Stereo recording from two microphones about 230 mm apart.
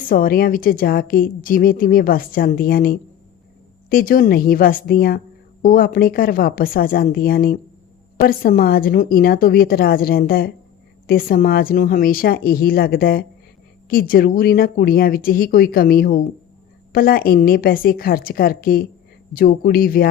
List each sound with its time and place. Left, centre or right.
0.1 s a woman's voice: left